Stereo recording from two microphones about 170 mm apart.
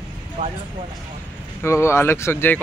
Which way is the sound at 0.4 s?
35° right (ahead or behind).